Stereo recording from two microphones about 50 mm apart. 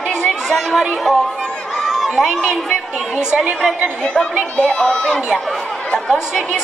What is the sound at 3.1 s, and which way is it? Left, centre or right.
Speech, right.